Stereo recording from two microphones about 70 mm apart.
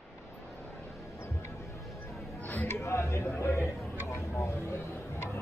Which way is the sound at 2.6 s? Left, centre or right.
Left.